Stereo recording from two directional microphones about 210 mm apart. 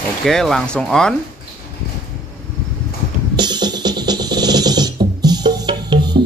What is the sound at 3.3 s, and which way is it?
Music, 20° right (ahead or behind).